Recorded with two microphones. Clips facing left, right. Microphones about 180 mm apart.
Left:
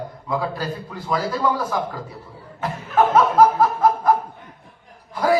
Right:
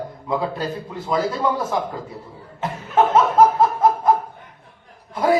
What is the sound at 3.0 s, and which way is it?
Speech, 25° right (ahead or behind).